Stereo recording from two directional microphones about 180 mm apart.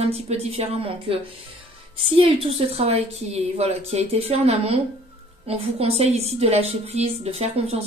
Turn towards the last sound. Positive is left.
turn(degrees=-35)  # may be behind; listen again after turning